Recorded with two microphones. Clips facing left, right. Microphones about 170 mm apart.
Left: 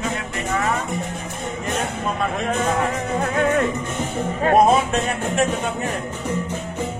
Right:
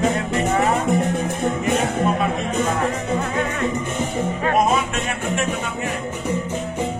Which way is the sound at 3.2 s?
50° left (ahead or behind).